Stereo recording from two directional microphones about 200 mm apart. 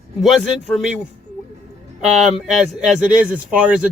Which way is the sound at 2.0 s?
5° right (ahead or behind).